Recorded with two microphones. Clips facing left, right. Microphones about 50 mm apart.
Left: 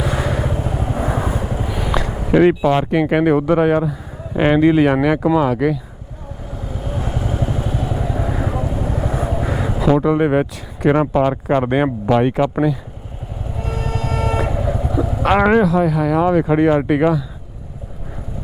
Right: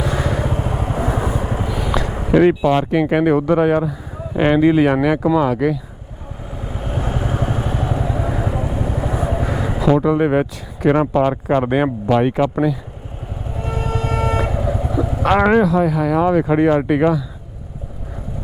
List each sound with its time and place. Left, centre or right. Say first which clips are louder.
0.0 s vehicle: even; centre
0.7 s vehicle: even; right
1.0 s vehicle: even; centre
2.2 s speech: even; centre
6.7 s vehicle: right 1 dB; right
7.3 s vehicle: right 1 dB; right
7.9 s vehicle: right 1 dB; centre
9.4 s a sound: even; centre
9.8 s speech: even; centre
13.6 s vehicle: right 2 dB; centre
16.7 s speech: even; centre